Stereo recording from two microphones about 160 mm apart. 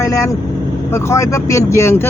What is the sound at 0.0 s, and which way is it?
Speech, 20° left (ahead or behind).